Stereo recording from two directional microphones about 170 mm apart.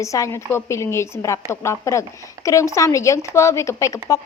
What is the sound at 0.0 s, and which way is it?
A woman's voice, 20° left (ahead or behind).